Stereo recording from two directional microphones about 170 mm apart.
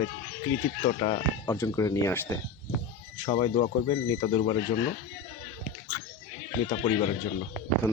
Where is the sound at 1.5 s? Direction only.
20° left (ahead or behind).